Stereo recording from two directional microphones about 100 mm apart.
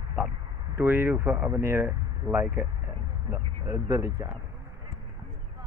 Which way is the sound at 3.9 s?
40° right (ahead or behind).